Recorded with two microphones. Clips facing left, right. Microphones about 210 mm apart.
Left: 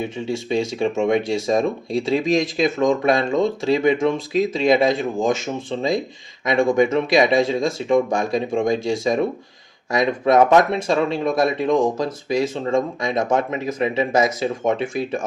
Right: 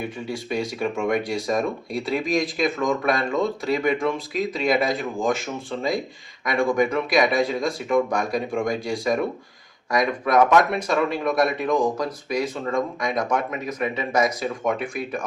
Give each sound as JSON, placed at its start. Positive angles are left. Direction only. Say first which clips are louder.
{"t": 0.0, "sound": "speech", "louder": "left 5 dB", "side_deg": 25}